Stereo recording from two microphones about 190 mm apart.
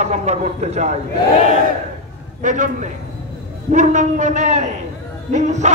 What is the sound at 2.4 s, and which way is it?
A man's voice, 40° right (ahead or behind).